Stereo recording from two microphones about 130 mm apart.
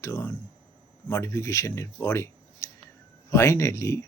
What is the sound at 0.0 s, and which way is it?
Speech, 20° left (ahead or behind).